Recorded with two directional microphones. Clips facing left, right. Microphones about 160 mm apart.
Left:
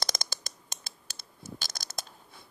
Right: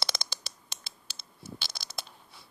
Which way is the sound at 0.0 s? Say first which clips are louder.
Left 1 dB; 45° left (ahead or behind).